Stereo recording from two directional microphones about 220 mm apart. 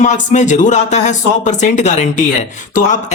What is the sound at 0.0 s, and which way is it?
Speech, 35° left (ahead or behind).